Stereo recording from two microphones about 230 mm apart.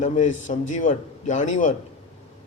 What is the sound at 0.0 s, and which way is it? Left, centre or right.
A man's voice, left.